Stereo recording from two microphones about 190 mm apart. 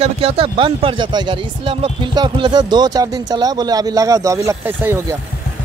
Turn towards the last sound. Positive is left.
turn(degrees=-15)  # may be behind; listen again after turning